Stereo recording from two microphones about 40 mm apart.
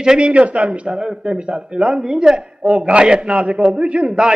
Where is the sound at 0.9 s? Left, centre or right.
Centre.